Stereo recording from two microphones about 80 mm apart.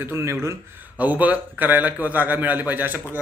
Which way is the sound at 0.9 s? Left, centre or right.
Right.